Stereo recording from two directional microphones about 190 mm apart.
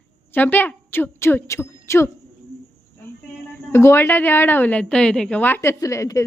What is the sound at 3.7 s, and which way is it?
A woman's voice, 15° left (ahead or behind).